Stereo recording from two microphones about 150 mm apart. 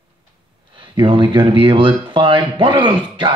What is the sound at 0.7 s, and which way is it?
Speech, 30° right (ahead or behind).